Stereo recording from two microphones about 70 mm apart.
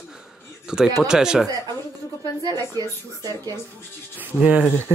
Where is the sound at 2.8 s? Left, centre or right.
Right.